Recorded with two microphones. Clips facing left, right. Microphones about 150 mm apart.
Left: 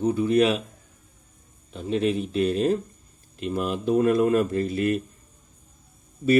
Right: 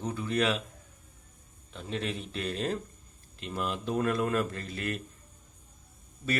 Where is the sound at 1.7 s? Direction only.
15° left (ahead or behind).